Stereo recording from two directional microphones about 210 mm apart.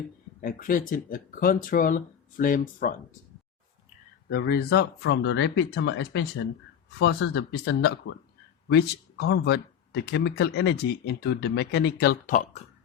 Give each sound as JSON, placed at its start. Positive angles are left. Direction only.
{"t": 0.4, "sound": "speech", "side_deg": 40}
{"t": 4.3, "sound": "speech", "side_deg": 50}